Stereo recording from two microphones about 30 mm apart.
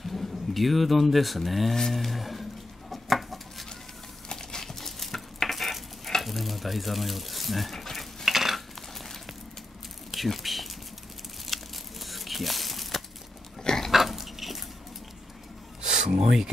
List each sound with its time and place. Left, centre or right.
0.0 s speech: centre
2.9 s dishes: centre
4.3 s cutlery: left; by 7.7 s centre
7.7 s stir: centre
8.3 s cutlery: centre
8.5 s dishes: centre
10.1 s speech: centre
11.4 s crumpling: centre
13.7 s pig: centre
13.9 s dog: centre